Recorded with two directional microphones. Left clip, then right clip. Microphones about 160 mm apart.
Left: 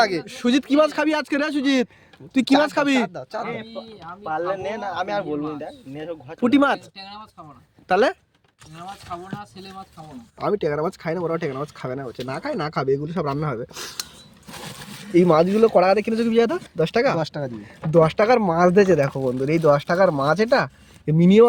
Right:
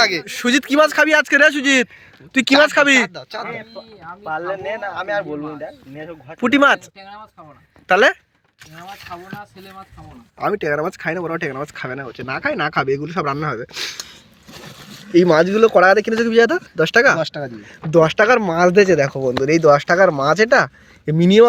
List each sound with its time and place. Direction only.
0.0 s speech: 65° left (ahead or behind)
0.3 s speech: centre (ahead or behind)
3.1 s speech: 70° left (ahead or behind)
6.4 s speech: 5° left (ahead or behind)
7.0 s speech: 35° left (ahead or behind)
7.9 s speech: centre (ahead or behind)
9.0 s speech: 25° left (ahead or behind)
10.3 s speech: centre (ahead or behind)
15.1 s speech: 5° left (ahead or behind)
17.2 s speech: 90° left
17.9 s speech: 5° left (ahead or behind)